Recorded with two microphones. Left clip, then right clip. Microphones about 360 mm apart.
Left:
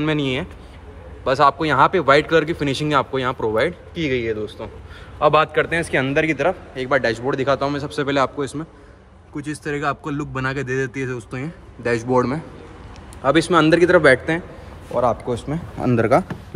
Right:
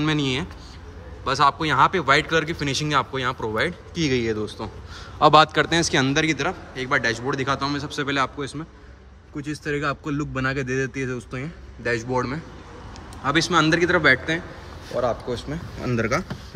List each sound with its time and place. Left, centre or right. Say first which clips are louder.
0.0 s speech: left 2 dB; centre
15.4 s speech: left 6 dB; left